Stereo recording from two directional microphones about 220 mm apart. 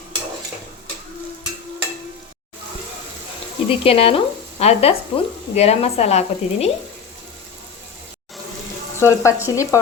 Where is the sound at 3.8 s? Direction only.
25° left (ahead or behind).